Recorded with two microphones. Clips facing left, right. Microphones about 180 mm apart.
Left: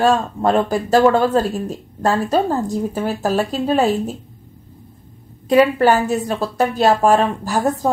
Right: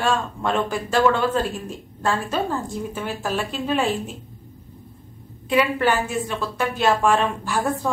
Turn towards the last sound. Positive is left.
turn(degrees=40)  # may be behind; listen again after turning